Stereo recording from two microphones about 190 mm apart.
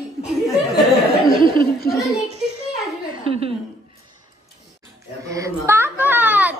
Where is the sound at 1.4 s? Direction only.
25° right (ahead or behind).